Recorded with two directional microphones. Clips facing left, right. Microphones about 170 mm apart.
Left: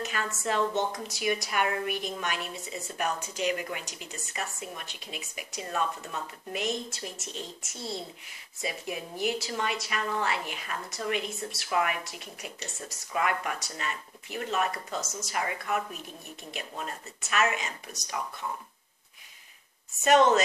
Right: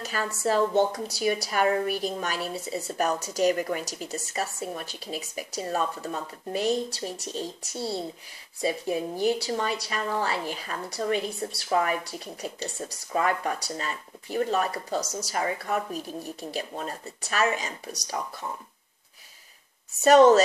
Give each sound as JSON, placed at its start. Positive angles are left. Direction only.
{"t": 0.0, "sound": "a woman's voice", "side_deg": -35}
{"t": 20.0, "sound": "a woman's voice", "side_deg": -35}